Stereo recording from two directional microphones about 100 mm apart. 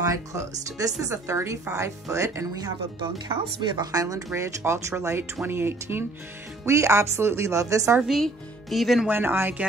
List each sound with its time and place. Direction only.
0.0 s speech: 35° right (ahead or behind)
3.7 s speech: 40° right (ahead or behind)
8.1 s speech: centre (ahead or behind)
9.0 s speech: 20° right (ahead or behind)